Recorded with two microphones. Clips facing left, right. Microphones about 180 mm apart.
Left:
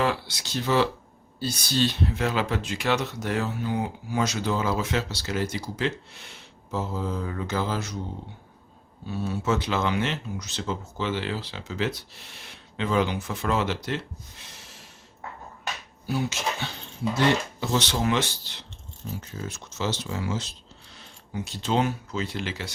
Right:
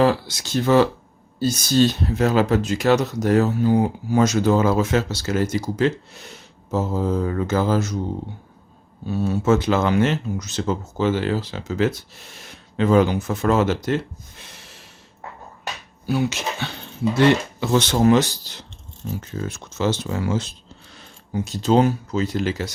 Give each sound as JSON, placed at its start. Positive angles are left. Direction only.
{"t": 0.0, "sound": "speech", "side_deg": -40}
{"t": 9.0, "sound": "speech", "side_deg": -45}
{"t": 16.0, "sound": "speech", "side_deg": -70}
{"t": 17.6, "sound": "speech", "side_deg": -55}
{"t": 19.0, "sound": "speech", "side_deg": -60}